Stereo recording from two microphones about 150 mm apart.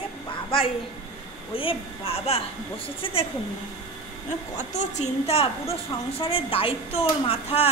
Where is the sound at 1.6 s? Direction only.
40° left (ahead or behind).